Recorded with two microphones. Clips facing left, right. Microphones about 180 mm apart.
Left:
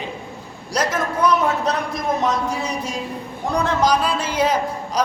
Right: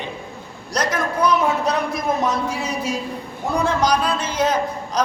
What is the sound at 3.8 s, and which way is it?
Speech, 5° left (ahead or behind).